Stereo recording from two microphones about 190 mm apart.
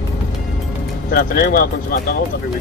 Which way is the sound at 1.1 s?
50° left (ahead or behind).